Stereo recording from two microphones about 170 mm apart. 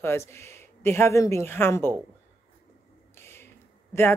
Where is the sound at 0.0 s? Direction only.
15° left (ahead or behind).